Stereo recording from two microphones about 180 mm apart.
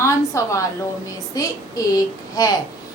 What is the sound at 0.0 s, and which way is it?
A woman's voice, 15° left (ahead or behind).